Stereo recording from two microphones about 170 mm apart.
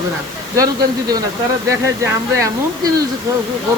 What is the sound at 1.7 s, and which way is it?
Speech, 15° right (ahead or behind).